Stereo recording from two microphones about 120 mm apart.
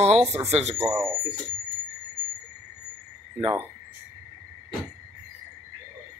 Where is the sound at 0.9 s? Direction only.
20° right (ahead or behind).